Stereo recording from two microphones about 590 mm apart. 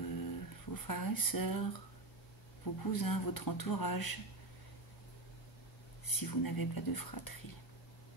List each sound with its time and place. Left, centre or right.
0.0 s a sound: left
2.6 s speech: left
6.0 s speech: left